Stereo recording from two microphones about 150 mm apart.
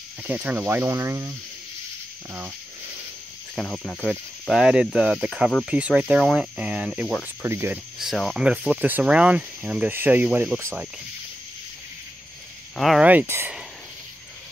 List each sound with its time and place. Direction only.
0.2 s speech: 10° right (ahead or behind)
3.5 s speech: 5° left (ahead or behind)
7.4 s speech: 15° right (ahead or behind)
8.0 s speech: centre (ahead or behind)
12.7 s speech: centre (ahead or behind)